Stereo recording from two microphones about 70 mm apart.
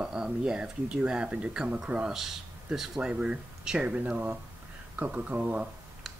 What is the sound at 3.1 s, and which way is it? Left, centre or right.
Speech, centre.